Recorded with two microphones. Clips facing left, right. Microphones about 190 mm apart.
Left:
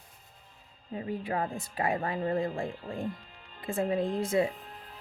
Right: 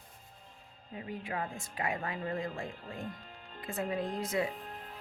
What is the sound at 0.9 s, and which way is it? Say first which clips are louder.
A woman's voice: left 6 dB; 35° left (ahead or behind).